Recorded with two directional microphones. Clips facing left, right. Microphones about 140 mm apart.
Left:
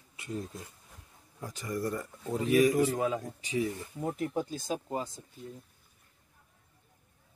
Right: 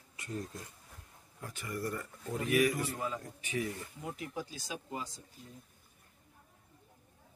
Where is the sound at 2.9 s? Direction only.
90° left.